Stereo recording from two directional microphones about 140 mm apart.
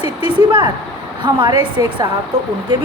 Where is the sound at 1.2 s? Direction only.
35° right (ahead or behind).